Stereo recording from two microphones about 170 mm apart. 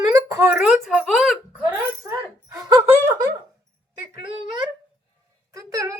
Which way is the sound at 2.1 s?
20° right (ahead or behind).